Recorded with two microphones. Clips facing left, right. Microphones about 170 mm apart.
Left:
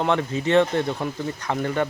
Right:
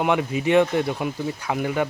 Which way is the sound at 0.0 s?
10° right (ahead or behind).